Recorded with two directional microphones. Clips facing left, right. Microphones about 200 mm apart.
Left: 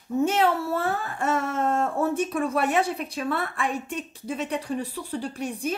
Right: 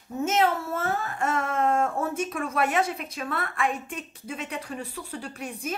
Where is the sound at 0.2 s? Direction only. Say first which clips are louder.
Left 1 dB; 35° left (ahead or behind).